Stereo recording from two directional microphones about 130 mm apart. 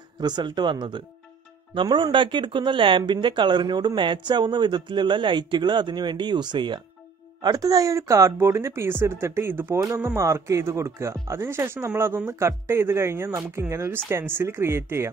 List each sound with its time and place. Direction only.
0.2 s speech: 35° right (ahead or behind); by 15.0 s 20° right (ahead or behind)